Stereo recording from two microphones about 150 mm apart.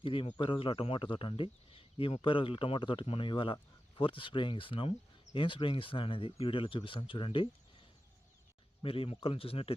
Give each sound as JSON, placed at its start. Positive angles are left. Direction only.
{"t": 0.0, "sound": "speech", "side_deg": 35}
{"t": 8.8, "sound": "speech", "side_deg": 40}